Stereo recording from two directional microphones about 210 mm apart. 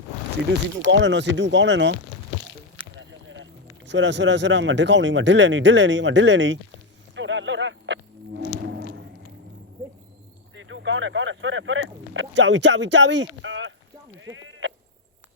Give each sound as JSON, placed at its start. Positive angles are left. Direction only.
{"t": 0.9, "sound": "speech", "side_deg": -60}
{"t": 3.0, "sound": "speech", "side_deg": -65}
{"t": 7.2, "sound": "vehicle", "side_deg": -60}
{"t": 8.6, "sound": "a sound", "side_deg": -55}
{"t": 10.5, "sound": "speech", "side_deg": -65}
{"t": 14.2, "sound": "sheep", "side_deg": -65}